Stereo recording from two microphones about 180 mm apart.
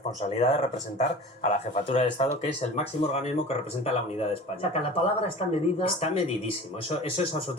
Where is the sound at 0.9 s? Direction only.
40° left (ahead or behind).